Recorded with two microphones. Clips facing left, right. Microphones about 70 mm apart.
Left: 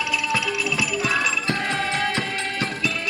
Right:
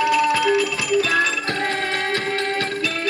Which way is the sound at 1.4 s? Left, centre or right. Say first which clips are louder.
Right 1 dB; right.